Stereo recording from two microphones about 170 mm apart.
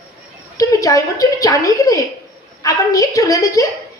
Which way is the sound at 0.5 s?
20° left (ahead or behind).